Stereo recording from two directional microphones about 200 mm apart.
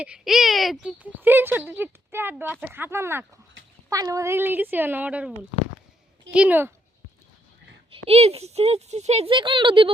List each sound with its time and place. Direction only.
0.0 s speech: 5° right (ahead or behind)
6.3 s speech: 5° right (ahead or behind)
8.0 s speech: 30° right (ahead or behind)